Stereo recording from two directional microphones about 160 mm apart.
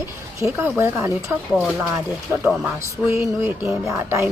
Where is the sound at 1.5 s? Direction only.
Centre (ahead or behind).